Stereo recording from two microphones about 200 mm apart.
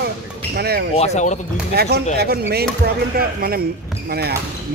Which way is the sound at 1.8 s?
55° right (ahead or behind).